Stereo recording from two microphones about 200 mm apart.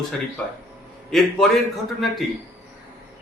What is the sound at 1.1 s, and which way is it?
Speech, centre (ahead or behind).